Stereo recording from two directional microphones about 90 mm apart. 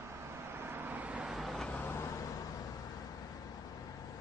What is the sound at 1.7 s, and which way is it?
Vehicle, 15° left (ahead or behind).